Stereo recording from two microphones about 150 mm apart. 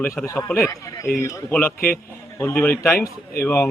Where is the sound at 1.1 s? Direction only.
75° left (ahead or behind).